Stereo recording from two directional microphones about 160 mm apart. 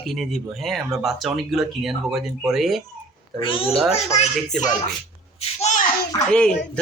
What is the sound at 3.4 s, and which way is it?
Speech, 35° left (ahead or behind).